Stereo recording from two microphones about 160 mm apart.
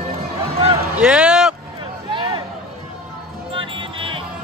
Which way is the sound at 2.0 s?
30° right (ahead or behind).